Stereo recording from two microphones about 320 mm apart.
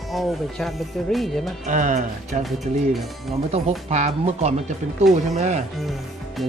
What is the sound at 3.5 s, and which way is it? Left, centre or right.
Speech, right.